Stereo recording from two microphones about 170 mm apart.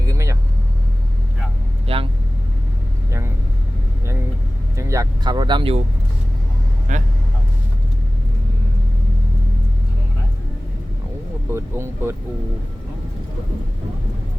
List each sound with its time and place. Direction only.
0.0 s vehicle: 20° right (ahead or behind)
1.9 s vehicle: 35° right (ahead or behind)
4.8 s vehicle: 20° right (ahead or behind)
6.9 s vehicle: 50° right (ahead or behind)
11.5 s vehicle: 15° right (ahead or behind)